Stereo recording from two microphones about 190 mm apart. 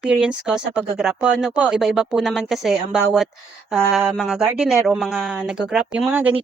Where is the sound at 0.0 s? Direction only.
5° right (ahead or behind).